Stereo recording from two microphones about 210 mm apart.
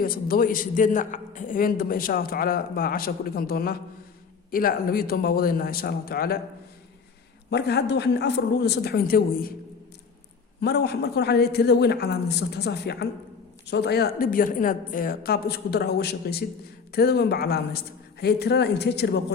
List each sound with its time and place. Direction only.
0.0 s a man's voice: 45° left (ahead or behind)
7.5 s a man's voice: 50° left (ahead or behind)
10.6 s a man's voice: 50° left (ahead or behind)